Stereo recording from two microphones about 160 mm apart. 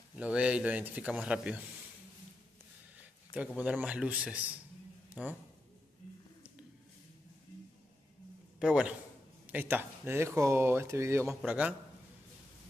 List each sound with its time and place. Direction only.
0.2 s speech: 5° right (ahead or behind)
3.0 s a man's voice: 10° right (ahead or behind)
8.5 s a man's voice: 5° right (ahead or behind)